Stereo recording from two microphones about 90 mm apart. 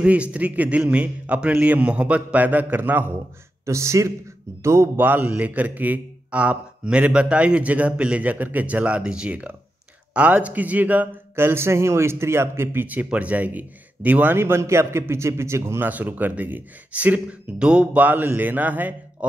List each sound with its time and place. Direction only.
0.0 s a man's voice: 15° right (ahead or behind)
3.6 s a man's voice: 35° right (ahead or behind)
15.9 s a man's voice: 20° right (ahead or behind)